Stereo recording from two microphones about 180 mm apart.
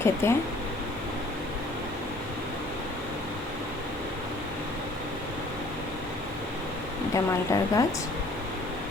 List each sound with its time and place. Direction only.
0.0 s speech: 15° left (ahead or behind)
7.1 s speech: 20° left (ahead or behind)